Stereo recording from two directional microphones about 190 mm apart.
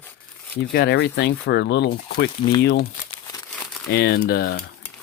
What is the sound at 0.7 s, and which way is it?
Speech, 55° left (ahead or behind).